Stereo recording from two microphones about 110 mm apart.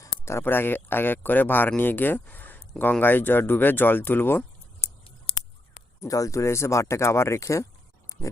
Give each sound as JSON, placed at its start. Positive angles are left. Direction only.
{"t": 0.0, "sound": "speech", "side_deg": 25}
{"t": 6.0, "sound": "speech", "side_deg": 30}